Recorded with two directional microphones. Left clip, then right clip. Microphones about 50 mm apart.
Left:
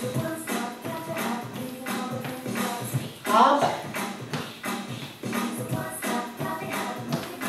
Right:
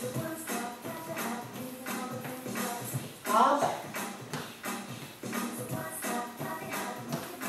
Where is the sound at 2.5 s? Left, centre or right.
Right.